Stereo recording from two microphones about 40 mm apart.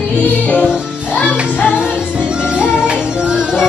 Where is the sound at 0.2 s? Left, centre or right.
Left.